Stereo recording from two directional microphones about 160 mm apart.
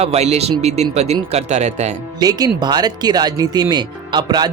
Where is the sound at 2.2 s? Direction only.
25° right (ahead or behind).